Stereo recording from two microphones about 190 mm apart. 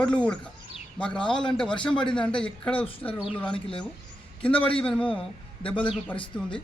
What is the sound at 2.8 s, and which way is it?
Speech, 30° left (ahead or behind).